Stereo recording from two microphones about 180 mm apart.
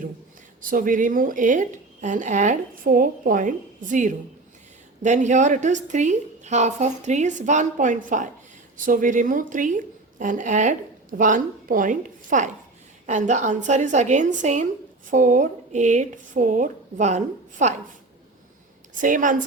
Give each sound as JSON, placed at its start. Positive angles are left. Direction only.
{"t": 0.6, "sound": "a woman's voice", "side_deg": -50}
{"t": 18.9, "sound": "a woman's voice", "side_deg": -45}